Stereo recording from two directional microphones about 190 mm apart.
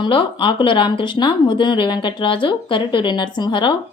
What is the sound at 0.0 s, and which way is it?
Speech, 25° left (ahead or behind).